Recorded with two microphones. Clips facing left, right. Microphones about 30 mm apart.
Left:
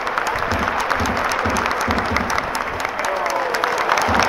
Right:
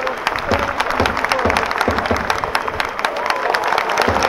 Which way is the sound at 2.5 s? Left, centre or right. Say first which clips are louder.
Right 2 dB; right.